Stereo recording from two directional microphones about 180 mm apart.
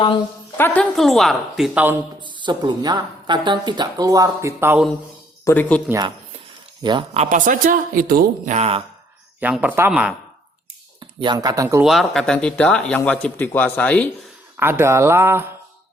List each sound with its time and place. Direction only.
0.5 s speech: 10° left (ahead or behind); by 2.0 s 10° right (ahead or behind)
2.2 s speech: 25° right (ahead or behind)
5.5 s a man's voice: 10° left (ahead or behind)
6.8 s speech: 30° right (ahead or behind)
7.3 s a man's voice: 45° right (ahead or behind)
8.5 s speech: 35° right (ahead or behind)
9.4 s speech: 10° right (ahead or behind)
11.2 s speech: 25° right (ahead or behind)
11.8 s a man's voice: centre (ahead or behind)
14.5 s speech: 10° right (ahead or behind)